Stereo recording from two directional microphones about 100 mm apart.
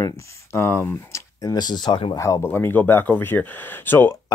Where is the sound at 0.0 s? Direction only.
30° left (ahead or behind); by 2.0 s 45° left (ahead or behind).